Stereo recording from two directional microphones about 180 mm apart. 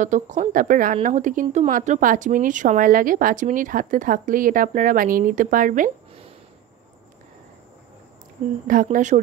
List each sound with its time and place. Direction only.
0.0 s speech: 45° right (ahead or behind)
8.6 s speech: 50° right (ahead or behind)